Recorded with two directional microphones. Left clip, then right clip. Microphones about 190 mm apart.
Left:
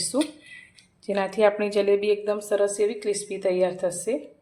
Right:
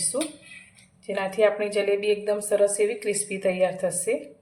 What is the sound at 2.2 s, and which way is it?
A woman's voice, 25° left (ahead or behind).